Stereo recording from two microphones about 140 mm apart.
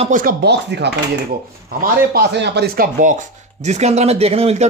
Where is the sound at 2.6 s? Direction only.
90° right.